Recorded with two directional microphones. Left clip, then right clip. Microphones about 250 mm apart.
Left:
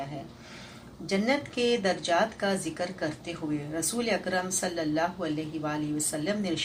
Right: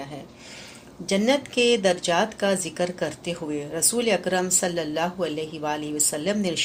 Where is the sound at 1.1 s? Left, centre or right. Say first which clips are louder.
Right 6 dB; right.